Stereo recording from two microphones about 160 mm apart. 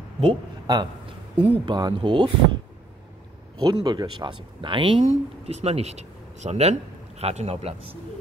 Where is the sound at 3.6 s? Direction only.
25° right (ahead or behind).